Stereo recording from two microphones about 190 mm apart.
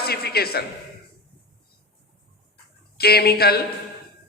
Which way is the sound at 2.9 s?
55° left (ahead or behind).